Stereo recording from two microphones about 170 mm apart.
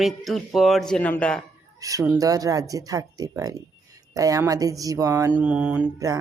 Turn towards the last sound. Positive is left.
turn(degrees=-10)  # may be behind; listen again after turning